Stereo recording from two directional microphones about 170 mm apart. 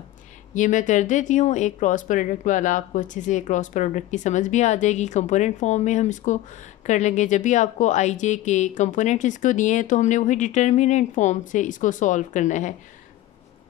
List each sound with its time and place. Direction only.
0.6 s speech: 45° left (ahead or behind)